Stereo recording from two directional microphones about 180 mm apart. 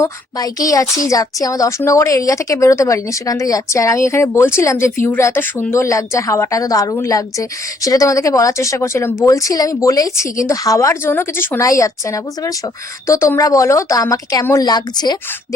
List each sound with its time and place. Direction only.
0.0 s a woman's voice: 20° left (ahead or behind)